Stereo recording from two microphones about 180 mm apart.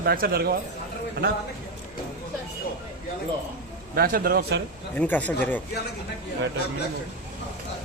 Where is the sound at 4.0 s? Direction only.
50° right (ahead or behind).